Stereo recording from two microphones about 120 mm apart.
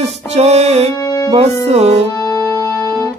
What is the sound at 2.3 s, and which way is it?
Music, 30° left (ahead or behind).